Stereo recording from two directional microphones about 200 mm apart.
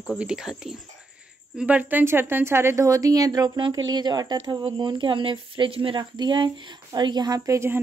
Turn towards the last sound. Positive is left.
turn(degrees=-15)  # may be behind; listen again after turning